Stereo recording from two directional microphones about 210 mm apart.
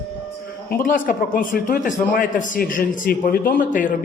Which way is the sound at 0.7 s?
40° left (ahead or behind).